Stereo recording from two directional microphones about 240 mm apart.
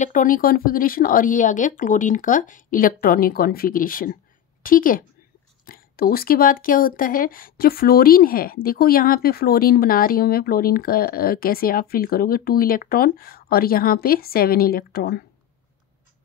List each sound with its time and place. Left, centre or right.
0.0 s speech: left